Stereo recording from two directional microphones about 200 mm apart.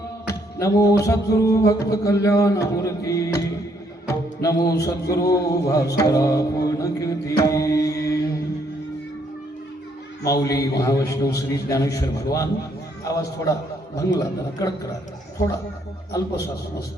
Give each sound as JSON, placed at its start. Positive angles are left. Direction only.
{"t": 0.3, "sound": "speech", "side_deg": 15}
{"t": 4.1, "sound": "music", "side_deg": 15}
{"t": 4.8, "sound": "a sound", "side_deg": 15}
{"t": 10.2, "sound": "speech", "side_deg": 15}